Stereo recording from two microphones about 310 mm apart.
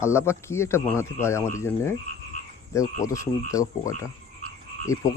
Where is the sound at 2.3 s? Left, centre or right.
Left.